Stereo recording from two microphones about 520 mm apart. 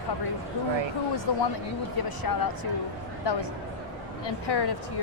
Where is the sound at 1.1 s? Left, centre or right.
Left.